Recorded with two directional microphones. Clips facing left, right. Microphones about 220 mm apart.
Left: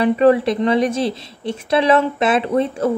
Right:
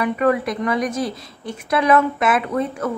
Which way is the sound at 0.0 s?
30° left (ahead or behind).